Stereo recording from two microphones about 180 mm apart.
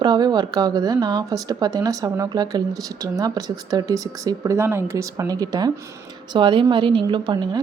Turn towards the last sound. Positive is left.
turn(degrees=-25)  # may be behind; listen again after turning